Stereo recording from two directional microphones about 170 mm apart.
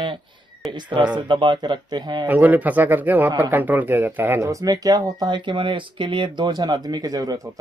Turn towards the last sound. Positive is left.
turn(degrees=-20)  # may be behind; listen again after turning